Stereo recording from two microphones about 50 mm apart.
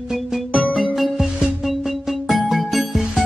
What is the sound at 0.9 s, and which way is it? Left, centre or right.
Music, centre.